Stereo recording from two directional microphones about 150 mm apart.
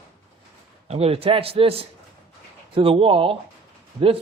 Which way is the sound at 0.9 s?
45° right (ahead or behind).